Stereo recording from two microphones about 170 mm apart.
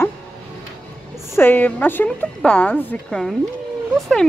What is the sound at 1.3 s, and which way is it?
A woman's voice, 10° left (ahead or behind).